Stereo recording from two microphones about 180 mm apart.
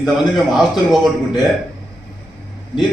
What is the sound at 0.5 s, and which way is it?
Speech, centre (ahead or behind).